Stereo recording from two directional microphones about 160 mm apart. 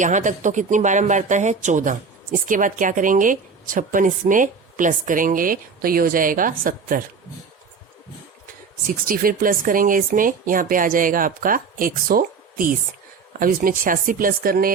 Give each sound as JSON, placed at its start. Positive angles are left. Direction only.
{"t": 0.0, "sound": "speech", "side_deg": -50}
{"t": 8.9, "sound": "speech", "side_deg": -60}